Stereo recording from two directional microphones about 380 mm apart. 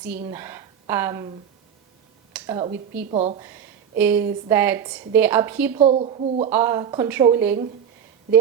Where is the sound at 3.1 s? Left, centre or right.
Centre.